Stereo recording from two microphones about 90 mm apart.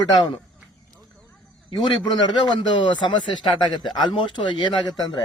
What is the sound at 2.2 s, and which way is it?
Speech, 55° left (ahead or behind).